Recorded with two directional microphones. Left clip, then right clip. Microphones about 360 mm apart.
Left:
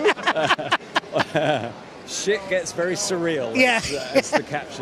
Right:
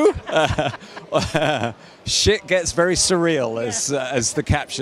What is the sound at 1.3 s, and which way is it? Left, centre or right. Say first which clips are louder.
A man's voice: right 2 dB; right.